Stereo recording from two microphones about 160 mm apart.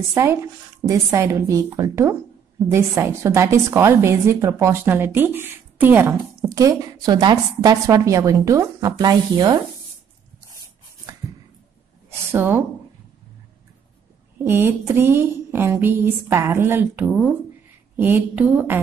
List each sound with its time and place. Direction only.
0.1 s a woman's voice: 15° right (ahead or behind)
12.3 s a woman's voice: 10° right (ahead or behind)
14.4 s a woman's voice: 15° right (ahead or behind)